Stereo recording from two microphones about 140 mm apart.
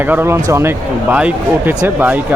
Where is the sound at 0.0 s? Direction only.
15° right (ahead or behind).